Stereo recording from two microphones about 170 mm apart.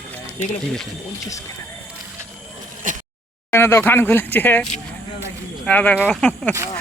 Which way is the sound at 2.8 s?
50° right (ahead or behind).